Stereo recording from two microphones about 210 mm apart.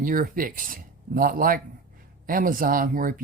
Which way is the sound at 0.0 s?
40° right (ahead or behind).